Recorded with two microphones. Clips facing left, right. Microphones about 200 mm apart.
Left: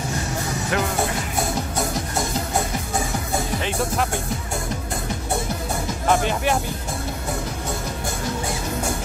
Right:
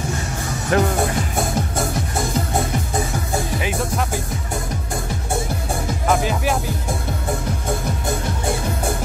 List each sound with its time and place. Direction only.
0.7 s music: 40° right (ahead or behind)
6.2 s music: centre (ahead or behind)